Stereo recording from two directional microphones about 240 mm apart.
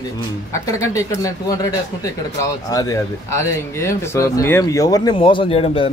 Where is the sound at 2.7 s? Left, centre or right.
Centre.